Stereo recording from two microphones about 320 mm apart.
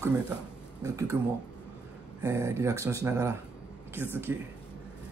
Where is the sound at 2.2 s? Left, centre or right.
Centre.